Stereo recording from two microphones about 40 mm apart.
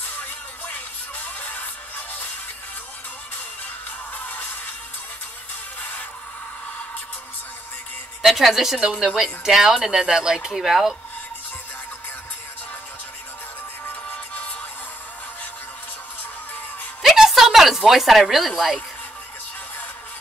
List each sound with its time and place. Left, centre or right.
1.1 s music: left
4.1 s music: left
8.2 s speech: centre
14.0 s music: left
17.0 s a sound: centre